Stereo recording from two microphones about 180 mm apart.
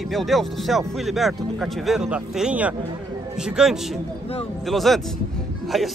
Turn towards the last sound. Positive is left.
turn(degrees=0)  # may be behind; listen again after turning